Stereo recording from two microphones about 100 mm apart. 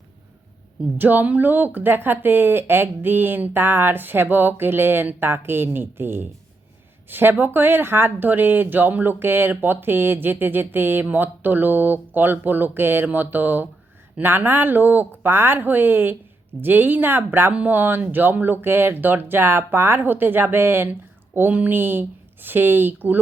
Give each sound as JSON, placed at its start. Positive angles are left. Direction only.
{"t": 0.9, "sound": "speech", "side_deg": -20}